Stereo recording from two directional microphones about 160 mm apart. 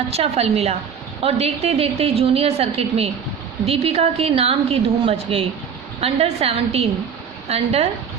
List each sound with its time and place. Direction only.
0.1 s a woman's voice: 40° right (ahead or behind)